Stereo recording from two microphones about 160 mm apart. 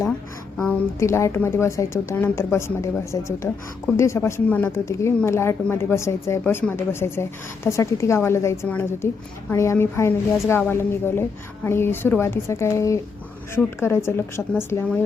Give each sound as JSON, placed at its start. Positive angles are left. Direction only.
{"t": 0.5, "sound": "a woman's voice", "side_deg": 5}
{"t": 0.9, "sound": "a woman's voice", "side_deg": 15}